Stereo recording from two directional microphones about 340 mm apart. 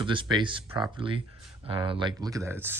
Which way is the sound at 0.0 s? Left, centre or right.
Centre.